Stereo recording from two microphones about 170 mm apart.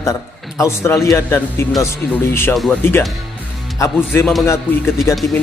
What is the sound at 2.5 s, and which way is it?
Speech, centre (ahead or behind).